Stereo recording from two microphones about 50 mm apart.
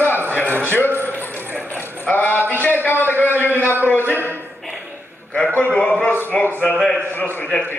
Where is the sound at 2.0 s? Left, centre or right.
Left.